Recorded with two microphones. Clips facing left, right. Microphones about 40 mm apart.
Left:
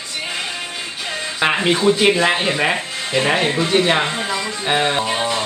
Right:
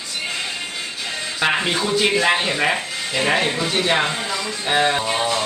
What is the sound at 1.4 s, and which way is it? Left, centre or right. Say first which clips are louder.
Music: left 2 dB; left.